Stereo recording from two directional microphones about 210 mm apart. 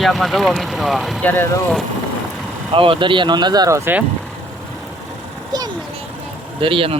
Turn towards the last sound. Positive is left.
turn(degrees=-25)  # may be behind; listen again after turning